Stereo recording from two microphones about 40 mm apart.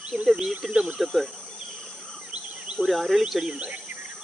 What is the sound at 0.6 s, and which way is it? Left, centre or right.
Speech, centre.